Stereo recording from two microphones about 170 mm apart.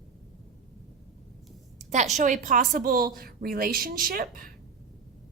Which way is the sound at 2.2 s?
45° right (ahead or behind).